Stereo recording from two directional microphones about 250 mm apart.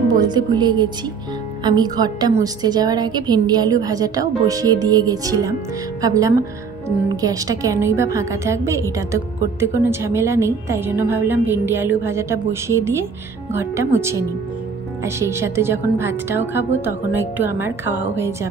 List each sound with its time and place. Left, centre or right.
0.1 s a woman's voice: centre